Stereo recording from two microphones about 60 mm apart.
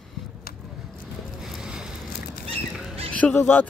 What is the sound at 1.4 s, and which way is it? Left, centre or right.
Boat, centre.